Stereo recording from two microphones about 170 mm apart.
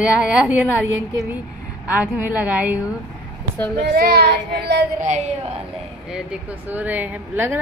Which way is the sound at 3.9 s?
65° right (ahead or behind).